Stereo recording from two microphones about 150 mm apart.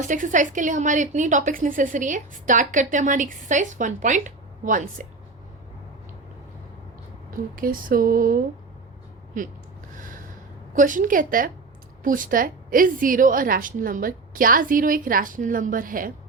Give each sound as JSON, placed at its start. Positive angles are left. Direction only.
{"t": 0.0, "sound": "a woman's voice", "side_deg": -55}
{"t": 7.5, "sound": "speech", "side_deg": -70}
{"t": 9.4, "sound": "a woman's voice", "side_deg": -60}
{"t": 10.8, "sound": "a woman's voice", "side_deg": -60}